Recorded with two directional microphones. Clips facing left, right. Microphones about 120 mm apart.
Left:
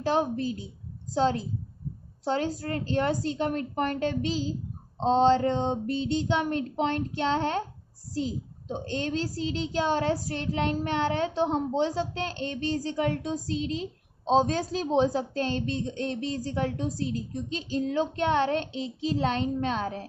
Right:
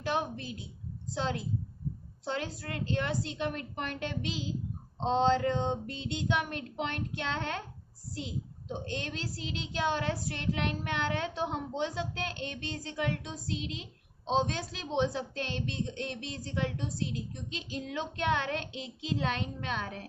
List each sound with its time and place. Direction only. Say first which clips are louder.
0.0 s a child's voice: left 7 dB; 35° left (ahead or behind)